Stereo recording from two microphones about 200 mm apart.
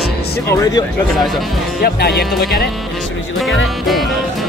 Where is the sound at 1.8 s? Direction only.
55° left (ahead or behind).